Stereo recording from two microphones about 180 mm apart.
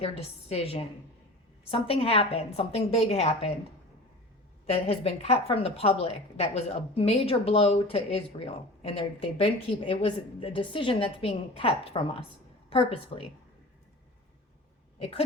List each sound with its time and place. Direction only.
0.0 s a woman's voice: 35° left (ahead or behind)
4.6 s a woman's voice: 35° left (ahead or behind)